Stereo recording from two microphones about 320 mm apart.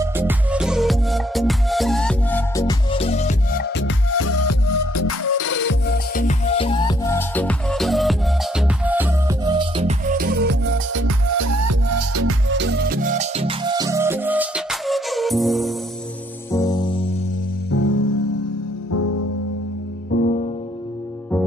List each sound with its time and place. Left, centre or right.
0.0 s music: centre; by 11.0 s right
11.0 s music: right; by 15.7 s centre
16.5 s music: centre
17.8 s music: left
20.1 s music: left